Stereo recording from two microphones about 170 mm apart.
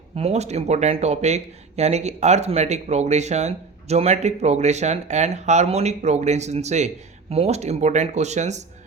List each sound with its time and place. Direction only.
0.2 s speech: 40° right (ahead or behind)